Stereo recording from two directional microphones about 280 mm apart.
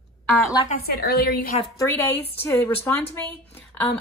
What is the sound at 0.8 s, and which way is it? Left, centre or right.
Speech, left.